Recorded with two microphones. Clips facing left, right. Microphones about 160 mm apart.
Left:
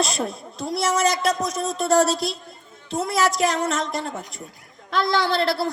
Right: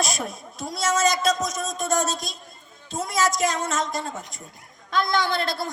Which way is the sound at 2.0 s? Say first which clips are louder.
Left 7 dB; 70° left (ahead or behind).